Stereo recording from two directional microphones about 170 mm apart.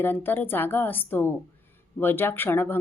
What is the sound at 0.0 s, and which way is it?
Speech, 10° left (ahead or behind).